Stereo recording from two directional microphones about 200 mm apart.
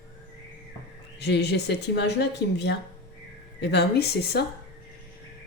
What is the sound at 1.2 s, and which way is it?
Speech, 60° left (ahead or behind).